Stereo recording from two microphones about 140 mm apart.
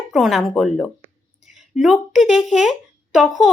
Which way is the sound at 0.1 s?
Centre (ahead or behind).